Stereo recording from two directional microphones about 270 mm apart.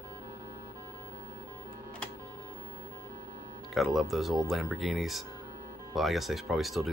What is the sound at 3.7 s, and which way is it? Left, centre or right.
Speech, centre.